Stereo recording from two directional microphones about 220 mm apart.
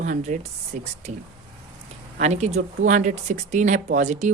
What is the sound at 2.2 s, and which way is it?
Speech, 30° right (ahead or behind).